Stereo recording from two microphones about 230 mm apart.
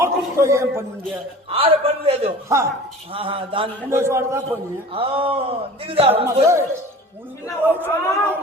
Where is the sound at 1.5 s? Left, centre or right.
Right.